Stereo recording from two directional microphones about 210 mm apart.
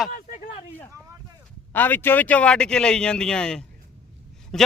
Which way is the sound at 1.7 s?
10° left (ahead or behind).